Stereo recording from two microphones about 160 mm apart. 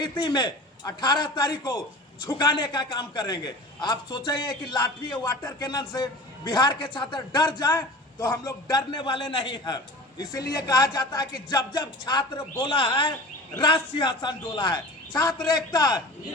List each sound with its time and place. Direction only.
0.0 s a man's voice: 30° left (ahead or behind)